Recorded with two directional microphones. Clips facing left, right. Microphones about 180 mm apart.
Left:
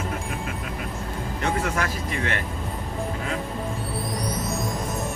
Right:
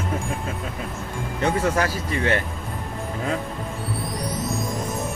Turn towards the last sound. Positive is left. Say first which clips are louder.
# right 1 dB
turn(degrees=0)  # may be behind; listen again after turning